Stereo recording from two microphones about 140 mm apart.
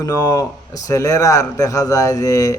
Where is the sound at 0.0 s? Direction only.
25° left (ahead or behind).